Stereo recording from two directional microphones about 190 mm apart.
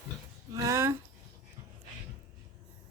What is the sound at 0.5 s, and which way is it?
Speech, 15° right (ahead or behind).